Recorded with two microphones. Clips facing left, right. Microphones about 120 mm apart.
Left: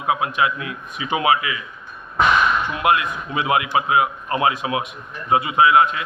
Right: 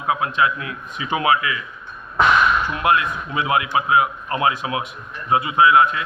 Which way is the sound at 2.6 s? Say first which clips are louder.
Even; 20° left (ahead or behind).